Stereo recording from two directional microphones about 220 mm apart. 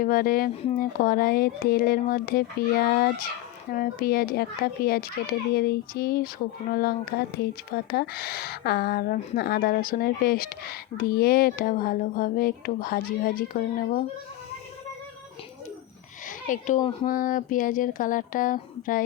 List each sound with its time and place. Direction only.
0.0 s a woman's voice: 40° left (ahead or behind)
16.5 s speech: 35° left (ahead or behind)